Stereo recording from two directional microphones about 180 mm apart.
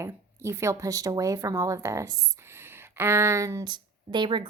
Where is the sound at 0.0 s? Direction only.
15° right (ahead or behind).